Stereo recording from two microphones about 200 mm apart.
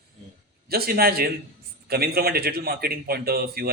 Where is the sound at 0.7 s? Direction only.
50° right (ahead or behind).